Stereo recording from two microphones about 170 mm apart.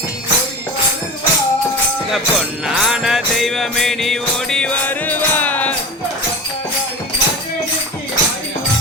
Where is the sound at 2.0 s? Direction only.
Centre (ahead or behind).